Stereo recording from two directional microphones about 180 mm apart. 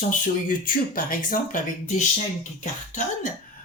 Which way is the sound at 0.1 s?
50° left (ahead or behind).